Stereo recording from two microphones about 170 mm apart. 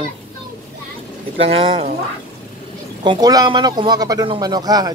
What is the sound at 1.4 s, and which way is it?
Speech, 35° right (ahead or behind).